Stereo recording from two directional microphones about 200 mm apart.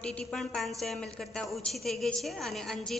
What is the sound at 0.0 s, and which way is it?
A woman's voice, 5° left (ahead or behind).